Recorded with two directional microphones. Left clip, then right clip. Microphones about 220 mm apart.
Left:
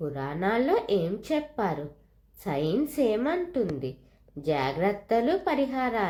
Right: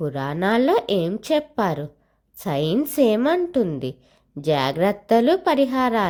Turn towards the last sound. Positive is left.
turn(degrees=-40)  # may be behind; listen again after turning